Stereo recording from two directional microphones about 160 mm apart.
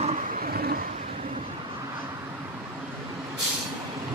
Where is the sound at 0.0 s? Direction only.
50° right (ahead or behind); by 0.7 s 70° right (ahead or behind).